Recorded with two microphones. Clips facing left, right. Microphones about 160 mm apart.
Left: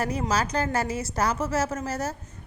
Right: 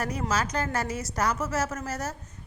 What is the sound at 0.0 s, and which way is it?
A woman's voice, 30° left (ahead or behind).